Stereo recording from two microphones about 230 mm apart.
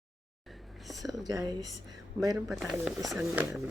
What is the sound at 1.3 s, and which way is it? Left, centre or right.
Speech, centre.